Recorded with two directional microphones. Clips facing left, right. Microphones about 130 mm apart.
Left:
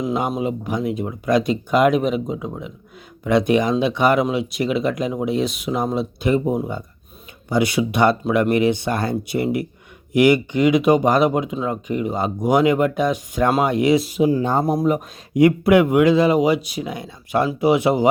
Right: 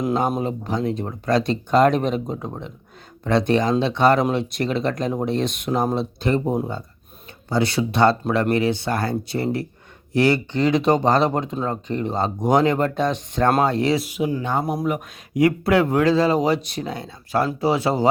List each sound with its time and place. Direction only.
0.3 s speech: 5° left (ahead or behind)
7.5 s speech: 15° left (ahead or behind)
14.3 s speech: 35° left (ahead or behind)
15.4 s speech: 20° left (ahead or behind)